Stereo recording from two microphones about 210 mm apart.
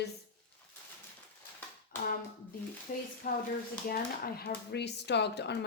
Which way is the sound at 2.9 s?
40° left (ahead or behind).